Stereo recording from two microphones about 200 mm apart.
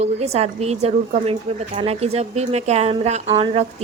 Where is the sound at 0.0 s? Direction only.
30° right (ahead or behind).